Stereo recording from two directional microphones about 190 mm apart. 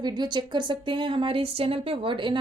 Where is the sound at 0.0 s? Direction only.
20° right (ahead or behind).